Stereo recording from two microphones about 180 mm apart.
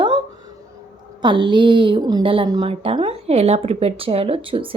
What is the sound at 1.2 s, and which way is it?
Speech, 25° right (ahead or behind).